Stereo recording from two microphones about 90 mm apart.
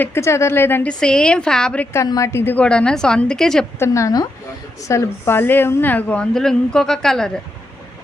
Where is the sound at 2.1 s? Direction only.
35° left (ahead or behind).